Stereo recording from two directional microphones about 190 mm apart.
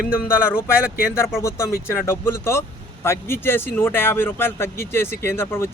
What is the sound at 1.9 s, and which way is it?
Speech, 10° left (ahead or behind).